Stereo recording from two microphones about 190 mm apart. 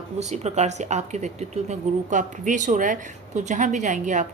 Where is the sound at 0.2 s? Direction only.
35° right (ahead or behind).